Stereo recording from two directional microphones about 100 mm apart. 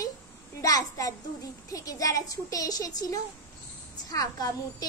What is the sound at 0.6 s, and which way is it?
A child's voice, 35° left (ahead or behind).